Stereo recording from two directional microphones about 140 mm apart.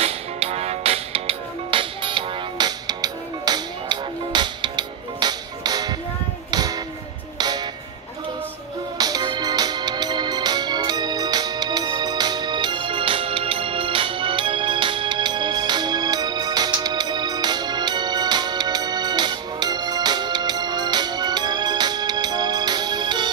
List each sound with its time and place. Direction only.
0.0 s music: 45° right (ahead or behind); by 7.6 s 30° right (ahead or behind)
8.9 s music: 30° right (ahead or behind)